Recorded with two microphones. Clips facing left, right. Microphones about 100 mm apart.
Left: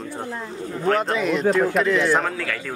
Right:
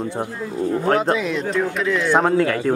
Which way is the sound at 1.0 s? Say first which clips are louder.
Right 1 dB; centre (ahead or behind).